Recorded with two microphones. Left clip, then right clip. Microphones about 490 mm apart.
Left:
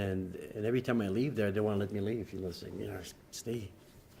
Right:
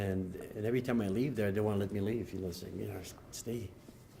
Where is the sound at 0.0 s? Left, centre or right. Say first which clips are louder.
Left 1 dB; left.